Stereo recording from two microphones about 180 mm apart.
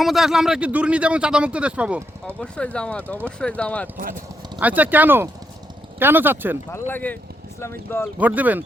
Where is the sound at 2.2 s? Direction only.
5° left (ahead or behind).